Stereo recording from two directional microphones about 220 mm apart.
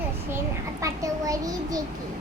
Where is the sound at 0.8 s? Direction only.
15° right (ahead or behind).